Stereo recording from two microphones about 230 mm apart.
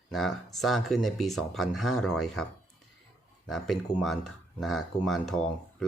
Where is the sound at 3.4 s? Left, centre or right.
Centre.